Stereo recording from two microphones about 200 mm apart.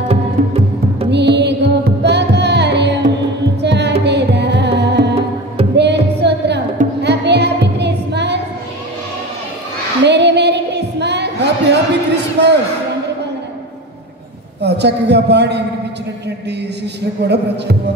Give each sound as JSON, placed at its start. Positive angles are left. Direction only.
{"t": 0.1, "sound": "music", "side_deg": -30}
{"t": 1.1, "sound": "music", "side_deg": -60}
{"t": 7.0, "sound": "a sound", "side_deg": -60}
{"t": 10.0, "sound": "a sound", "side_deg": -60}
{"t": 14.6, "sound": "a man's voice", "side_deg": -55}
{"t": 17.2, "sound": "speech", "side_deg": -55}